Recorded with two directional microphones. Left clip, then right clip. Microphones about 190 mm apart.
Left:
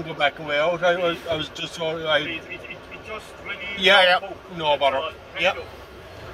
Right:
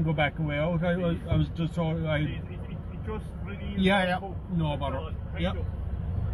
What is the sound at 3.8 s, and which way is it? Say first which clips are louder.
Speech: left 10 dB; 15° right (ahead or behind).